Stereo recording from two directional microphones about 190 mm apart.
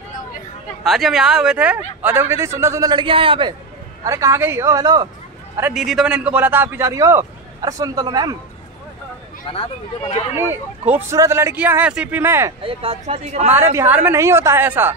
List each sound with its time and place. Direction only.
0.8 s a man's voice: centre (ahead or behind); by 3.5 s 25° right (ahead or behind)
4.0 s a man's voice: 15° right (ahead or behind)
5.6 s a man's voice: 5° right (ahead or behind); by 8.4 s 20° right (ahead or behind)
10.3 s a man's voice: 10° right (ahead or behind)
12.6 s speech: 30° right (ahead or behind)
13.5 s a man's voice: 15° right (ahead or behind)